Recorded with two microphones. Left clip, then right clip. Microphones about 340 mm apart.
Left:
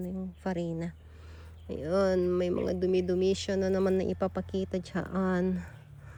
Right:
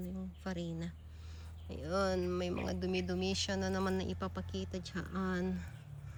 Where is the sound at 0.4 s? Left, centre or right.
Centre.